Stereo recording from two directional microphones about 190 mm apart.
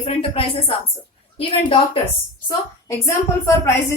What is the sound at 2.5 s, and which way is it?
Speech, 15° left (ahead or behind).